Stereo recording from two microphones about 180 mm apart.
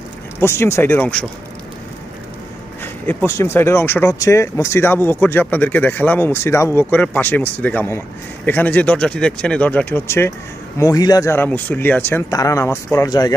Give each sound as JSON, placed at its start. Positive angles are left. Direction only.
{"t": 0.3, "sound": "speech", "side_deg": 15}
{"t": 2.8, "sound": "speech", "side_deg": 10}